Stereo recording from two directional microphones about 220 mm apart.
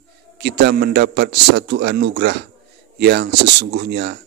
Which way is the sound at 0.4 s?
50° right (ahead or behind).